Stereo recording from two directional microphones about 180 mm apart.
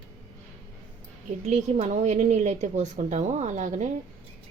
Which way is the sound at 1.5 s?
40° right (ahead or behind).